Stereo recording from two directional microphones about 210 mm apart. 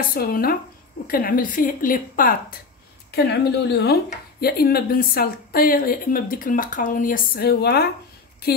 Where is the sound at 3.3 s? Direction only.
50° left (ahead or behind).